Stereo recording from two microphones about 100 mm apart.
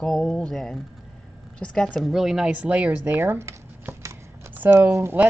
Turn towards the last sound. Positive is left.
turn(degrees=-15)  # may be behind; listen again after turning